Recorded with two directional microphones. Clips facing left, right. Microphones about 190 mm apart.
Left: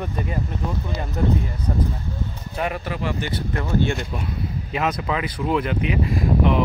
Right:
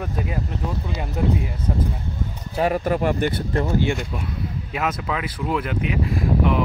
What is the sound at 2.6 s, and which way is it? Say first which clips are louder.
Speech: right 6 dB; 40° right (ahead or behind).